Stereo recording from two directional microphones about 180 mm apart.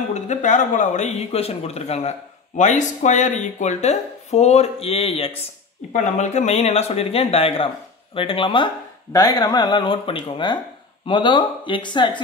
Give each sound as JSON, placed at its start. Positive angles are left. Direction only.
{"t": 0.1, "sound": "speech", "side_deg": 40}